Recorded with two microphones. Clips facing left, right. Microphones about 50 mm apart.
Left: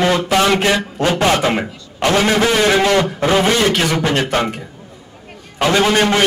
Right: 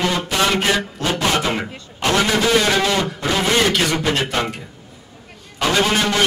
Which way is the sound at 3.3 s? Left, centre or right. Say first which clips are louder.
Left 2 dB; left.